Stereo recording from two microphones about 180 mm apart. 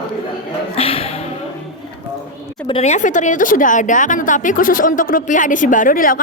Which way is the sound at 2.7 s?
35° left (ahead or behind).